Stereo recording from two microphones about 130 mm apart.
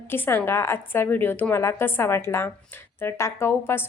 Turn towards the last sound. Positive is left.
turn(degrees=20)  # may be behind; listen again after turning